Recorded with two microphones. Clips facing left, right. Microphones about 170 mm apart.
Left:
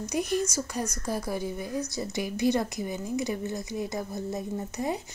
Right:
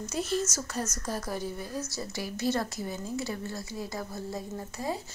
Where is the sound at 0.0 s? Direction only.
15° left (ahead or behind).